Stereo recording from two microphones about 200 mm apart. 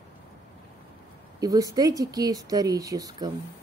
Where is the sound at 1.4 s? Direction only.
15° right (ahead or behind).